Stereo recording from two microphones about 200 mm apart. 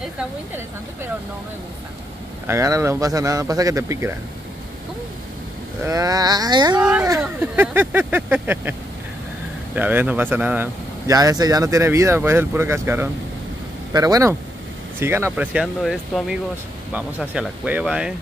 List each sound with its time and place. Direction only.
2.4 s speech: 15° right (ahead or behind)
5.9 s wail: 15° right (ahead or behind)
6.8 s speech: 5° right (ahead or behind)
9.8 s speech: 10° right (ahead or behind)